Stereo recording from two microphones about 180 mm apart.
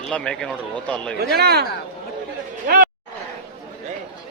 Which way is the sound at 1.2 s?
60° right (ahead or behind).